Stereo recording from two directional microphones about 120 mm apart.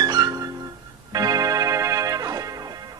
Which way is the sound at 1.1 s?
30° right (ahead or behind).